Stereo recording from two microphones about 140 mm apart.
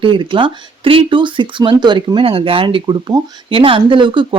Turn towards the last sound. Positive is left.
turn(degrees=-35)  # may be behind; listen again after turning